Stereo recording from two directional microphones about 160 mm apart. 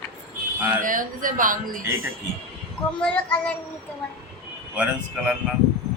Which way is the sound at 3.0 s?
10° left (ahead or behind).